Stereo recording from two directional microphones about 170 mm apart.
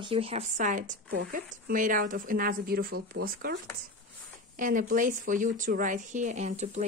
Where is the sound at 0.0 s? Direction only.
35° right (ahead or behind); by 3.5 s 60° right (ahead or behind).